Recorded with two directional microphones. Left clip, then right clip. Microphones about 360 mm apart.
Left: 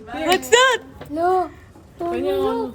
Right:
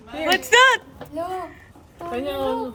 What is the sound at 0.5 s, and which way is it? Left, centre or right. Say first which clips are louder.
Speech: right 1 dB; centre.